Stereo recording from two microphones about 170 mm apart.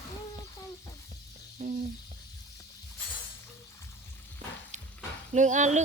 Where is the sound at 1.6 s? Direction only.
40° right (ahead or behind).